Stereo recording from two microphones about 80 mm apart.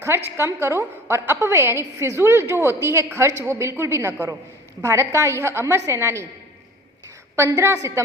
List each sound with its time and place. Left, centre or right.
0.0 s a woman's voice: right
7.3 s a woman's voice: right